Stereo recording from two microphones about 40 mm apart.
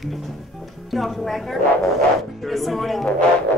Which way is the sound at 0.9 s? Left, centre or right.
Centre.